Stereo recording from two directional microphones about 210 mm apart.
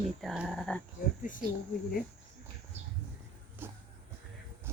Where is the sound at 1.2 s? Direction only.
40° left (ahead or behind).